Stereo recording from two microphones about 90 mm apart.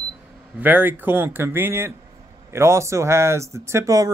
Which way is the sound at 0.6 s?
20° right (ahead or behind).